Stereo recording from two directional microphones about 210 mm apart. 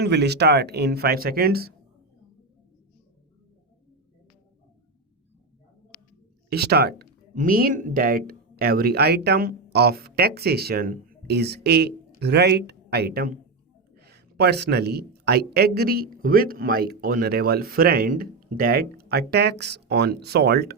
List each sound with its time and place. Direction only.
0.0 s speech: 50° right (ahead or behind)
6.5 s speech: 50° right (ahead or behind)